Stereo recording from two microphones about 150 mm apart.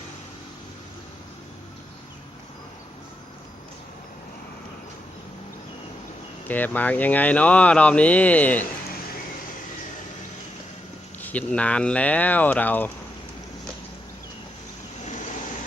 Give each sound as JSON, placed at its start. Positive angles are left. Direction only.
{"t": 6.5, "sound": "speech", "side_deg": 10}
{"t": 11.2, "sound": "speech", "side_deg": 10}